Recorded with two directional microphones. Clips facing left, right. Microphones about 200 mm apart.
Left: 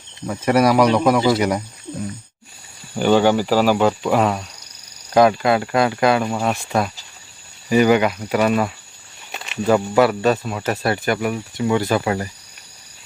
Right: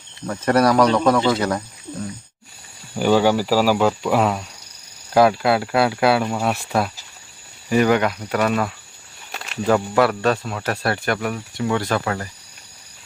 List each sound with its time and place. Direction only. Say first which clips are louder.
0.3 s speech: left 1 dB; 10° left (ahead or behind)
2.9 s speech: left 1 dB; 5° right (ahead or behind); by 12.3 s 15° left (ahead or behind)